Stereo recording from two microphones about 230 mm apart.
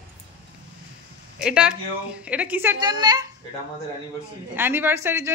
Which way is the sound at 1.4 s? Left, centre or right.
Centre.